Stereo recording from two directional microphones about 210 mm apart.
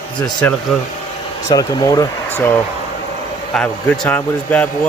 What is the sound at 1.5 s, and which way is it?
Speech, 20° left (ahead or behind).